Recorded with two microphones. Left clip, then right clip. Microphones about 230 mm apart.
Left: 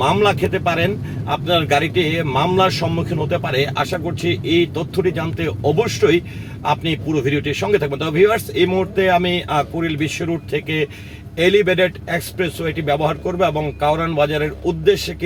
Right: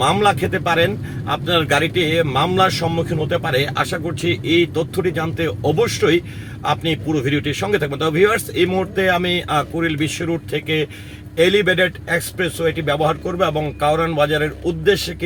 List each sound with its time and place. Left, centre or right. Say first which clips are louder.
0.0 s speech: even; right